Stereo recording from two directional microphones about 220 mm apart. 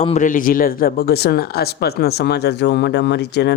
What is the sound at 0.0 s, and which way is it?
Speech, 35° left (ahead or behind).